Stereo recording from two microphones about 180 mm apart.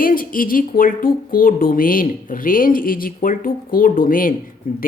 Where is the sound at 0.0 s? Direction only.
50° left (ahead or behind).